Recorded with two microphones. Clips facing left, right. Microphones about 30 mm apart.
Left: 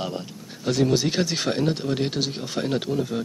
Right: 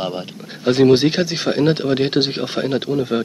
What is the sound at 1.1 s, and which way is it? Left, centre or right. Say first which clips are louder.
Speech: right 4 dB; centre.